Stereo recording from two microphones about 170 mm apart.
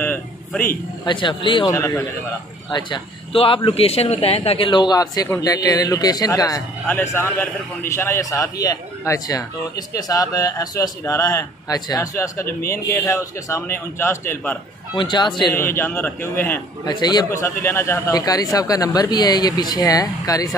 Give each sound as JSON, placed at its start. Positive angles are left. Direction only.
{"t": 0.0, "sound": "a sound", "side_deg": 10}
{"t": 1.0, "sound": "a man's voice", "side_deg": 30}
{"t": 15.0, "sound": "a man's voice", "side_deg": 25}
{"t": 15.5, "sound": "a man's voice", "side_deg": 15}
{"t": 16.8, "sound": "a man's voice", "side_deg": 25}